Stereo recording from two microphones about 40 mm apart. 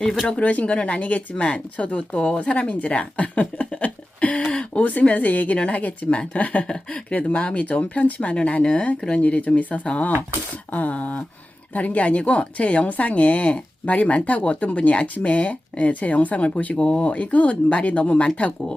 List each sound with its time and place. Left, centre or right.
0.3 s speech: left
3.8 s a sound: left
4.5 s speech: left
4.9 s speech: left
9.6 s speech: left